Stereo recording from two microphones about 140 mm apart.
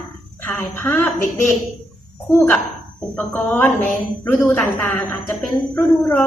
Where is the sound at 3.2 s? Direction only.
5° left (ahead or behind).